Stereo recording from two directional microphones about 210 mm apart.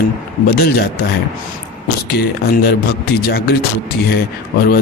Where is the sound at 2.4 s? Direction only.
50° left (ahead or behind).